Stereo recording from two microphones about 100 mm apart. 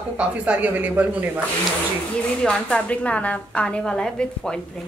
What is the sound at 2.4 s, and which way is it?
A woman's voice, 10° left (ahead or behind).